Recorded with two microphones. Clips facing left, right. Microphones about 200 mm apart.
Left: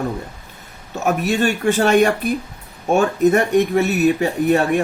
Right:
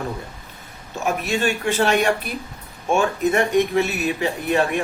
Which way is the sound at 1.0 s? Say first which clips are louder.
Left 4 dB; 45° left (ahead or behind).